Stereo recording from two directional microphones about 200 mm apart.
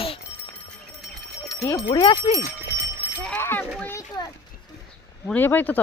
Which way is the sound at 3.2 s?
10° left (ahead or behind).